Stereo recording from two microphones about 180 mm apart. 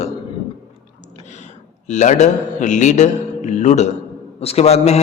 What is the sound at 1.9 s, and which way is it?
A man's voice, 40° left (ahead or behind).